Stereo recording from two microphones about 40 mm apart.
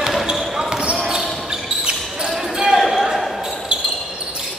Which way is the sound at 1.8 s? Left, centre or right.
Right.